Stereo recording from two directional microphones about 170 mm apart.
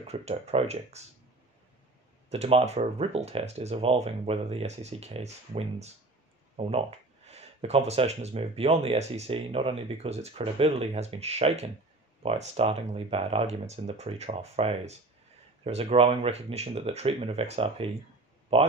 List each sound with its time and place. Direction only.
0.0 s speech: 40° right (ahead or behind)
2.2 s speech: 40° right (ahead or behind)